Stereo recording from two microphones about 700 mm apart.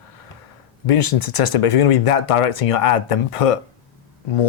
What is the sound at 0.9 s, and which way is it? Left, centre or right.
Speech, left.